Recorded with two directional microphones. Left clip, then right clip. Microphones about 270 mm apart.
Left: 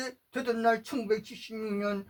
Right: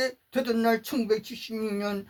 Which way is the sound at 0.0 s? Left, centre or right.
Right.